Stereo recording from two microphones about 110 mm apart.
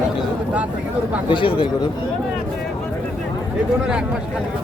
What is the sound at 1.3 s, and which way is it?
Speech, 50° left (ahead or behind).